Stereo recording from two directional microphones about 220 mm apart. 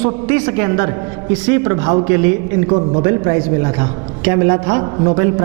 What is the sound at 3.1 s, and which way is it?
A man's voice, 20° right (ahead or behind).